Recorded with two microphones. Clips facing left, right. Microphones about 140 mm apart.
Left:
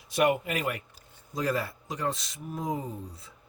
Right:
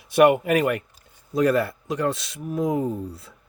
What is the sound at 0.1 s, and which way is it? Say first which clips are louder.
Speech: right 9 dB; 60° right (ahead or behind).